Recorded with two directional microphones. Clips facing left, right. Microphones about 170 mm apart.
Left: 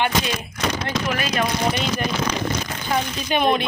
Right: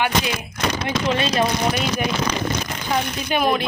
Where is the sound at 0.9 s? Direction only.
25° right (ahead or behind).